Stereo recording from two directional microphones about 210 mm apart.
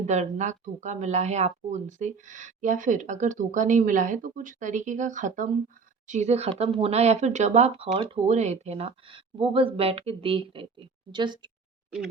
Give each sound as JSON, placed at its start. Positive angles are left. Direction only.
{"t": 0.0, "sound": "a woman's voice", "side_deg": -35}